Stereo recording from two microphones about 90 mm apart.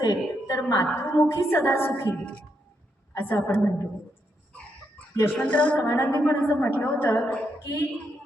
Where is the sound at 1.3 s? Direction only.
30° left (ahead or behind).